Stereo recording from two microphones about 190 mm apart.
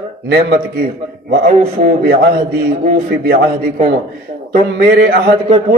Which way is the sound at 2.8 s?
55° right (ahead or behind).